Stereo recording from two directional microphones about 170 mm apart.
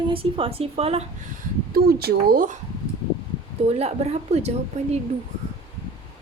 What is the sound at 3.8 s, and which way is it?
Speech, 40° right (ahead or behind).